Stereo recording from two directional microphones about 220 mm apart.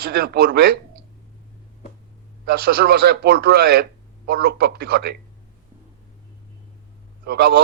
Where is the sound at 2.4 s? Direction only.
45° right (ahead or behind).